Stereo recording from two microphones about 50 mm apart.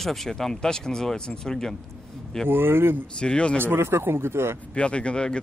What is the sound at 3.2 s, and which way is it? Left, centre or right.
Speech, left.